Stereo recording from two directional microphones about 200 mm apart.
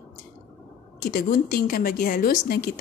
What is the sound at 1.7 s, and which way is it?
A woman's voice, 45° left (ahead or behind).